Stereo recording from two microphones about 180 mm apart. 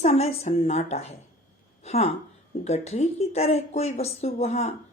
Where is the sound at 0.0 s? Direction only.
40° left (ahead or behind).